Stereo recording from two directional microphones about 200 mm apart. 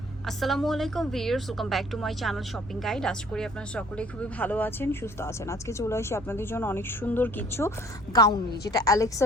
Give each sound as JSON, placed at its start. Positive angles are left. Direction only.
{"t": 0.3, "sound": "a woman's voice", "side_deg": 0}